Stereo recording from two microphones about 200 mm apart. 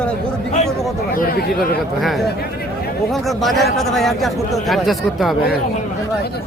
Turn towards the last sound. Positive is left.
turn(degrees=0)  # may be behind; listen again after turning